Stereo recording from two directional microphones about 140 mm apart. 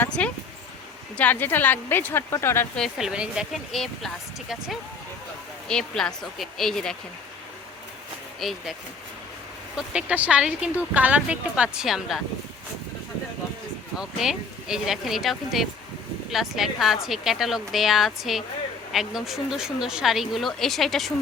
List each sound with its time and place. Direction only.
0.0 s speech: 10° left (ahead or behind)
2.7 s speech: centre (ahead or behind)
8.4 s speech: centre (ahead or behind)
9.7 s a woman's voice: 10° right (ahead or behind)
13.9 s speech: 5° right (ahead or behind)